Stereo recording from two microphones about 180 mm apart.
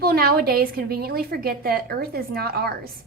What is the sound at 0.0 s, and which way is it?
A woman's voice, 55° right (ahead or behind).